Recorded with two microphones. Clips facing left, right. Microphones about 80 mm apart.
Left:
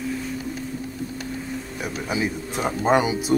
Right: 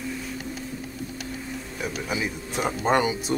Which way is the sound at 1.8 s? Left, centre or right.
Centre.